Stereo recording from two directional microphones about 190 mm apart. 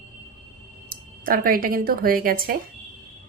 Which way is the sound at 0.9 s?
50° right (ahead or behind).